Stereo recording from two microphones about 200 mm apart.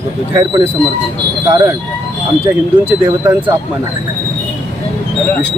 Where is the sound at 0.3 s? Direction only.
15° right (ahead or behind).